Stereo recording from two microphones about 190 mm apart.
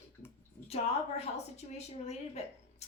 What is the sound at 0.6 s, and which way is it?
A woman's voice, 35° left (ahead or behind).